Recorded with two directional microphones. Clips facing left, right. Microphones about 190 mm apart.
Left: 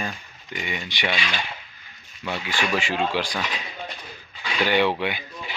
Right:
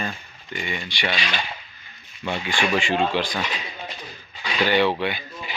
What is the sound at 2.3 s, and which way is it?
Speech, 5° left (ahead or behind).